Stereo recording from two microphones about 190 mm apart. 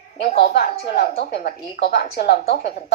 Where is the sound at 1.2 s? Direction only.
55° left (ahead or behind).